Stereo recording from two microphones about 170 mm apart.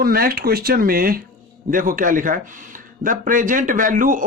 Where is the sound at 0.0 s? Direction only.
60° right (ahead or behind).